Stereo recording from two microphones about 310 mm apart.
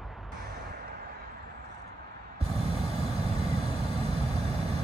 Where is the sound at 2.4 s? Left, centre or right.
Centre.